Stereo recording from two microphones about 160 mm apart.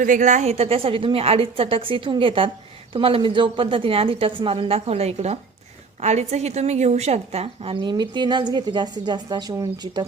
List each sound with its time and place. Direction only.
0.0 s a woman's voice: 50° right (ahead or behind); by 10.1 s 25° right (ahead or behind)